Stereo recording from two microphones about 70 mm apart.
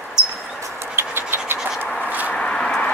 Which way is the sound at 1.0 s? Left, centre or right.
Right.